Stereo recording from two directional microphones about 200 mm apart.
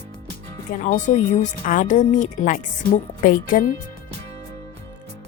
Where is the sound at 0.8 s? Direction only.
40° left (ahead or behind).